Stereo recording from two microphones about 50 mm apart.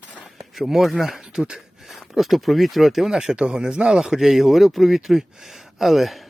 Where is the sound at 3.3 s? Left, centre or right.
Centre.